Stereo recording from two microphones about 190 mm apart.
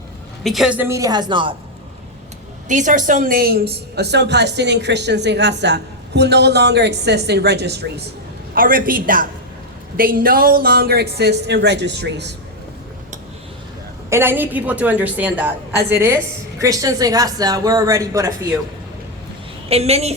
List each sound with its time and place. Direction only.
0.4 s a woman's voice: centre (ahead or behind); by 1.5 s 25° right (ahead or behind)
2.6 s a woman's voice: 40° right (ahead or behind); by 8.0 s 60° right (ahead or behind)
8.5 s a woman's voice: 50° right (ahead or behind); by 12.3 s 65° right (ahead or behind)
14.1 s a woman's voice: 10° right (ahead or behind)
19.6 s a woman's voice: 30° right (ahead or behind)